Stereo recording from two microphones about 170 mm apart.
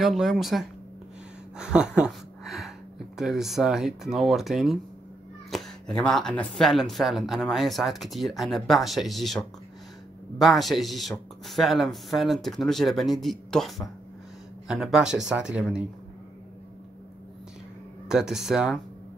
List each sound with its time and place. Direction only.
0.0 s speech: centre (ahead or behind)
18.0 s speech: 5° right (ahead or behind)